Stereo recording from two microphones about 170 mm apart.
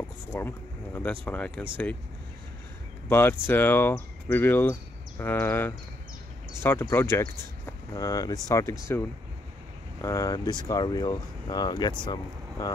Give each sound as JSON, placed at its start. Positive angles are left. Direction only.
{"t": 0.3, "sound": "speech", "side_deg": 15}
{"t": 3.1, "sound": "speech", "side_deg": 15}
{"t": 10.0, "sound": "speech", "side_deg": 20}